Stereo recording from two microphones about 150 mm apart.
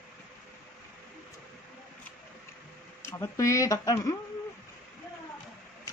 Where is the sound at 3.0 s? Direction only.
20° left (ahead or behind).